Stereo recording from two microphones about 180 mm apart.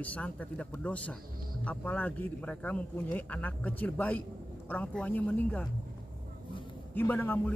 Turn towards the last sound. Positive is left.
turn(degrees=10)  # may be behind; listen again after turning